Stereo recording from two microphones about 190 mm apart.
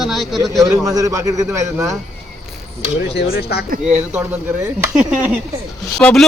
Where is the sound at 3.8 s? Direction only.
10° right (ahead or behind).